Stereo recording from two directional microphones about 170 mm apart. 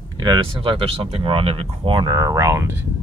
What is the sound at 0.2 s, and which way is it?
Speech, 25° right (ahead or behind).